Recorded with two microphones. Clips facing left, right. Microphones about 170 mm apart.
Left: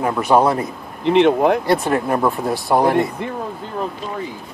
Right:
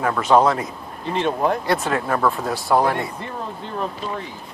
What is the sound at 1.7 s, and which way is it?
Speech, 15° left (ahead or behind).